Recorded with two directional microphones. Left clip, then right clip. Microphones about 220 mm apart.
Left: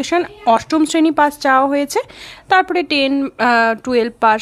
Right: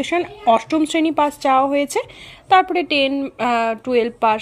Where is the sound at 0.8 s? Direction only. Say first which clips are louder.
Left 4 dB; 50° left (ahead or behind).